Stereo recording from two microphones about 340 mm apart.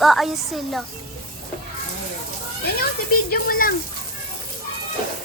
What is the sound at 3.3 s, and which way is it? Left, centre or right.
Speech, left.